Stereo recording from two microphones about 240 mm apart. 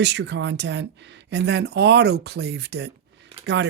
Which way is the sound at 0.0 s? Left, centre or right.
Right.